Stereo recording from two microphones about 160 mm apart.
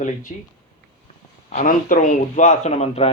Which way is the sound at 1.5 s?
55° left (ahead or behind).